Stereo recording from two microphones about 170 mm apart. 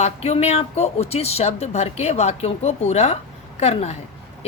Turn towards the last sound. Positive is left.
turn(degrees=40)  # may be behind; listen again after turning